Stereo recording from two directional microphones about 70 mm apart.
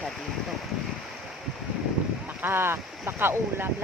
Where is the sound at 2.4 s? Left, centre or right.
Right.